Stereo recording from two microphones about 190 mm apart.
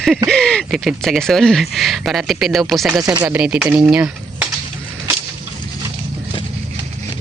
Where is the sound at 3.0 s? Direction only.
20° right (ahead or behind).